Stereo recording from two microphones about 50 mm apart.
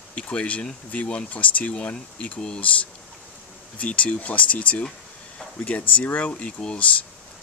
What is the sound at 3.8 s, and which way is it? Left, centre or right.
Speech, left.